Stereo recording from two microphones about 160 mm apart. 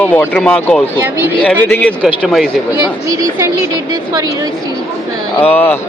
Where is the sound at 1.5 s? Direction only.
10° left (ahead or behind).